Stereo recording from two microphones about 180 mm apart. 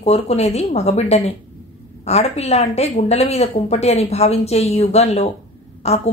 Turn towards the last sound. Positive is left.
turn(degrees=35)  # may be behind; listen again after turning